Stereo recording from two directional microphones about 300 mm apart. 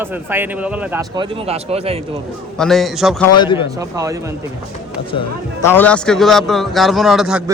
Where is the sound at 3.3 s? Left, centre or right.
Centre.